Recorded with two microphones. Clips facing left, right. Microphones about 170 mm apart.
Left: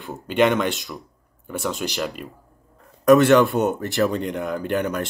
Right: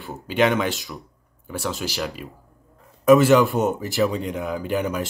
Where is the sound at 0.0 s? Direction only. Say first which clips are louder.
Left 1 dB; centre (ahead or behind).